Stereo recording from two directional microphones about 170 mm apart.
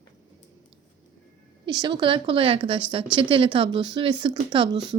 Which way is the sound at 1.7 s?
25° right (ahead or behind).